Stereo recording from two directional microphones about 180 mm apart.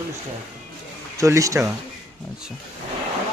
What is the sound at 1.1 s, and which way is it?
Speech, 15° right (ahead or behind).